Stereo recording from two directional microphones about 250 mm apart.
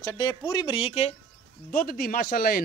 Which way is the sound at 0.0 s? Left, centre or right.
Centre.